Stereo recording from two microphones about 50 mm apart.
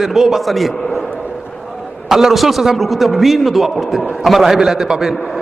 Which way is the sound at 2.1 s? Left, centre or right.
Centre.